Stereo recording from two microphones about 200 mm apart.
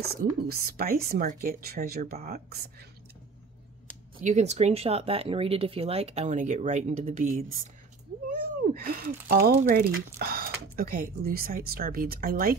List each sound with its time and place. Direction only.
0.0 s speech: 50° right (ahead or behind)
4.2 s speech: 35° right (ahead or behind)